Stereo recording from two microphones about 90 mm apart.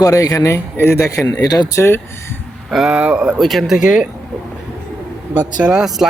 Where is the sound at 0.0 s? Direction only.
40° left (ahead or behind).